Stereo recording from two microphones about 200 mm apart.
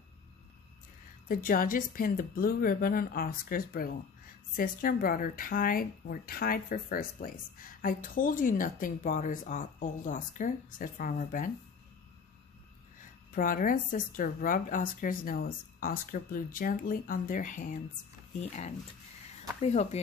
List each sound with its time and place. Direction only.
1.3 s a woman's voice: 45° left (ahead or behind)
13.0 s a woman's voice: 45° left (ahead or behind)
19.6 s speech: 35° left (ahead or behind)